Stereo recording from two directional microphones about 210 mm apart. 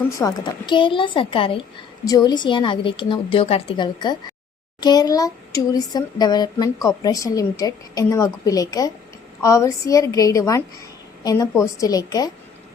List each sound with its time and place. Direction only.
0.2 s a woman's voice: 20° left (ahead or behind)